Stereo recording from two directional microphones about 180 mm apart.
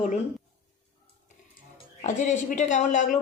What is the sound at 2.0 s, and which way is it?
Speech, 45° left (ahead or behind).